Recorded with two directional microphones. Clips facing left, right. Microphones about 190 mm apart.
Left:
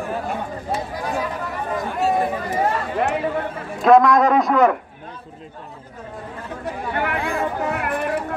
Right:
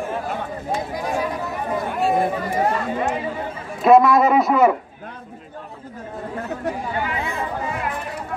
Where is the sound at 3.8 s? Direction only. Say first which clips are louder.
Even; 5° right (ahead or behind).